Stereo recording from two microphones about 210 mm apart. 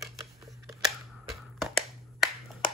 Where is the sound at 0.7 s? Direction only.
Centre (ahead or behind).